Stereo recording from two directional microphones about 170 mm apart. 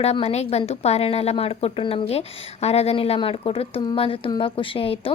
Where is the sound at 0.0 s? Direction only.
35° left (ahead or behind).